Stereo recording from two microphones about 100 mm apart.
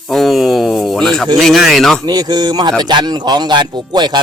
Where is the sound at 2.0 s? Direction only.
45° right (ahead or behind).